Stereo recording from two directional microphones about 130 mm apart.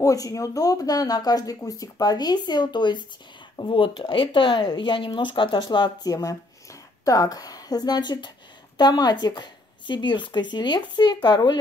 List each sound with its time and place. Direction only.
0.0 s speech: 25° left (ahead or behind)